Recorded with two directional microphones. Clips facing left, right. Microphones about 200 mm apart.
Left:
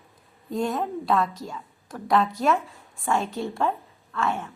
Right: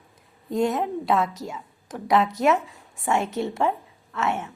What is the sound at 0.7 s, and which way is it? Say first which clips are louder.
Speech: right 1 dB; 20° right (ahead or behind).